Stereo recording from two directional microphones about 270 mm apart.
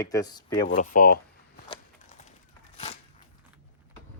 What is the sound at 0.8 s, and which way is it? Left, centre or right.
Speech, left.